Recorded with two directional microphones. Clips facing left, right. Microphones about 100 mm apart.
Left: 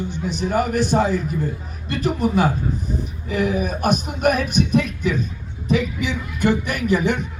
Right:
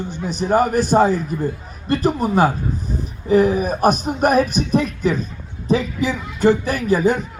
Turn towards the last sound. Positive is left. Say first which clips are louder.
# right 3 dB
turn(degrees=-35)  # may be behind; listen again after turning